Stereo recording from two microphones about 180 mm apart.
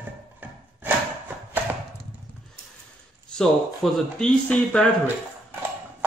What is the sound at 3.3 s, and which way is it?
Speech, 5° left (ahead or behind).